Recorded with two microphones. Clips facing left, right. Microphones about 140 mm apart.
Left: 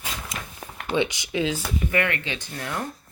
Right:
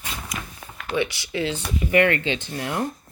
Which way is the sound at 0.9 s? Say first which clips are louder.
Left 1 dB; 20° left (ahead or behind).